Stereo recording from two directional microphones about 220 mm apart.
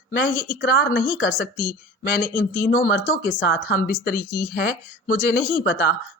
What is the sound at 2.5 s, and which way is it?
A woman's voice, 40° left (ahead or behind).